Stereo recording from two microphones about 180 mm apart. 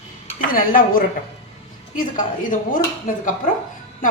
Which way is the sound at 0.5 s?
50° left (ahead or behind).